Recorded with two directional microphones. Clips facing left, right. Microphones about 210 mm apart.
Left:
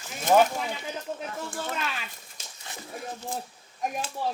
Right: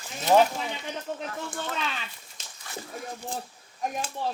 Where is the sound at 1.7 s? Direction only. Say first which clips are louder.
Even; 5° left (ahead or behind).